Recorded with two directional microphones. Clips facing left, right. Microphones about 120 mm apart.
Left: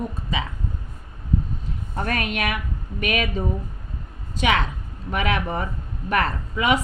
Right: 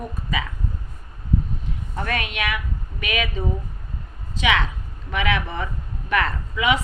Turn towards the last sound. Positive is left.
turn(degrees=45)  # may be behind; listen again after turning